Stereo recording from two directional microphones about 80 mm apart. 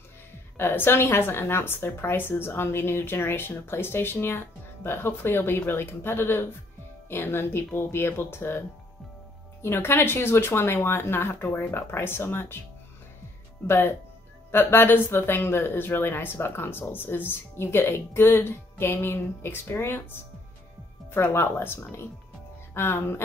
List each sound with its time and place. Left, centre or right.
0.6 s a woman's voice: left
13.7 s a woman's voice: left